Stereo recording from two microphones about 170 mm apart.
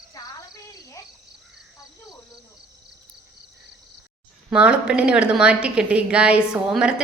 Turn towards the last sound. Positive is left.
turn(degrees=-5)  # may be behind; listen again after turning